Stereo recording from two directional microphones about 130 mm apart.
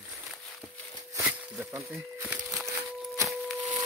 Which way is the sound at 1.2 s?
15° right (ahead or behind).